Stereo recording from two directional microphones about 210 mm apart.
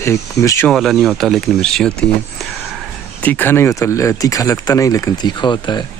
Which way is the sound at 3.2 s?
10° left (ahead or behind).